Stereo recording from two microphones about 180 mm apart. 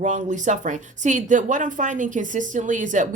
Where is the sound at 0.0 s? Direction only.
45° right (ahead or behind).